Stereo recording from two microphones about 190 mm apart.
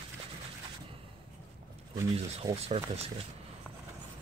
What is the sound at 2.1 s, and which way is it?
Rub, 35° right (ahead or behind).